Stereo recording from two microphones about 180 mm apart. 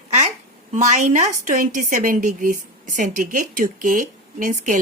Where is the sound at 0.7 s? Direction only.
40° right (ahead or behind).